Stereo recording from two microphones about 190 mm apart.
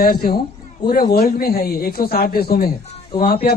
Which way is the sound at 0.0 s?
50° left (ahead or behind).